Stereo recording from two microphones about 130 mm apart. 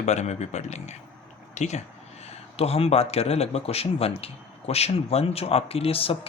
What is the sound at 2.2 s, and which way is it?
Speech, 50° left (ahead or behind).